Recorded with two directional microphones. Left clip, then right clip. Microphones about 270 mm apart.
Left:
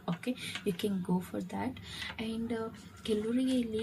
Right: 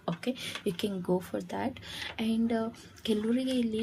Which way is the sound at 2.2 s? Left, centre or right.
Right.